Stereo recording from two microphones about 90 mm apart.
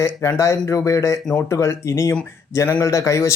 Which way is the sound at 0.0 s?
30° left (ahead or behind).